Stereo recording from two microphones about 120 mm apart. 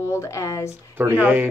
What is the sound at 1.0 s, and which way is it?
Speech, 15° right (ahead or behind).